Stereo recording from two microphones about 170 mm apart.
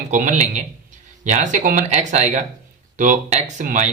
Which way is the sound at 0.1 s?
45° right (ahead or behind).